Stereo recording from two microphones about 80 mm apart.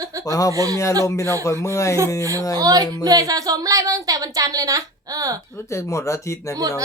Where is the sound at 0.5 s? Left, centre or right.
Right.